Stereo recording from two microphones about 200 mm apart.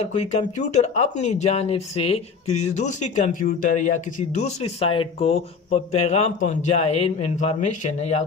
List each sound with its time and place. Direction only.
0.0 s speech: 35° left (ahead or behind)